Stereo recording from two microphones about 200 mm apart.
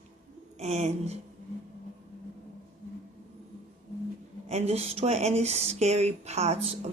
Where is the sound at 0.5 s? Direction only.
35° right (ahead or behind).